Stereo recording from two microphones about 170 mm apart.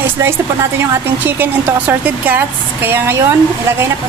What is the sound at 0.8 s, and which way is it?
Speech, 10° right (ahead or behind).